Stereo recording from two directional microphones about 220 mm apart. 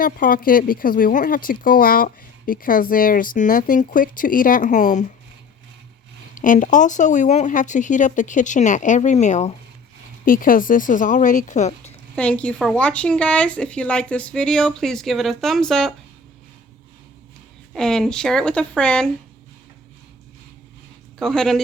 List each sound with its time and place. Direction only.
0.0 s speech: 40° left (ahead or behind)
6.3 s speech: 35° left (ahead or behind)
12.1 s a woman's voice: 5° left (ahead or behind)
17.7 s a woman's voice: centre (ahead or behind)
21.2 s a woman's voice: centre (ahead or behind)